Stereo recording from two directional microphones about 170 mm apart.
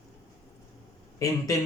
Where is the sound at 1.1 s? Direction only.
20° left (ahead or behind).